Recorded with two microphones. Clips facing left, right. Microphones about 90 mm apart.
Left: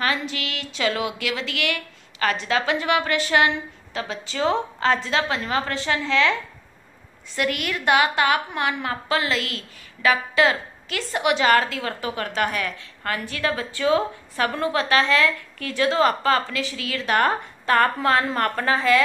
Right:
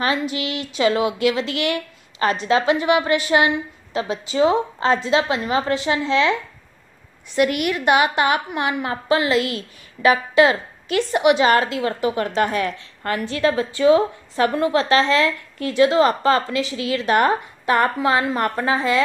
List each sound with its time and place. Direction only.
0.0 s a woman's voice: 20° right (ahead or behind)